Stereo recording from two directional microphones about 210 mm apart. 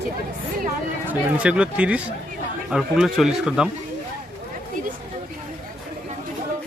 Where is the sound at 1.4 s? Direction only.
5° right (ahead or behind).